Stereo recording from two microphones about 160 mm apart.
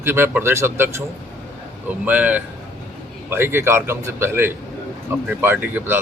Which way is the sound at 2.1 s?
10° right (ahead or behind).